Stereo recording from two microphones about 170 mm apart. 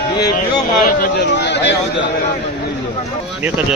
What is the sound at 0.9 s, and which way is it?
Speech, 60° left (ahead or behind).